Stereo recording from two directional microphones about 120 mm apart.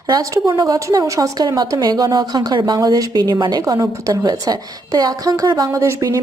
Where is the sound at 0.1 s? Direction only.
35° right (ahead or behind).